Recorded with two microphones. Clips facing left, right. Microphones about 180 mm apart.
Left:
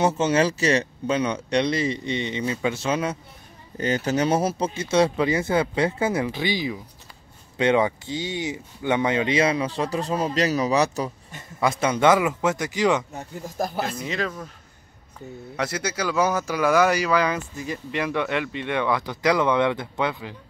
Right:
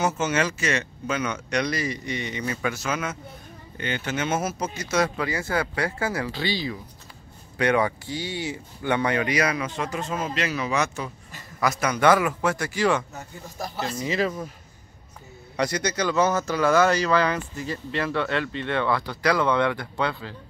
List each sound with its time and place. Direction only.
0.0 s speech: 30° left (ahead or behind)
11.3 s speech: 25° left (ahead or behind)
13.6 s speech: 50° left (ahead or behind)
14.0 s speech: centre (ahead or behind)
15.5 s speech: 5° left (ahead or behind)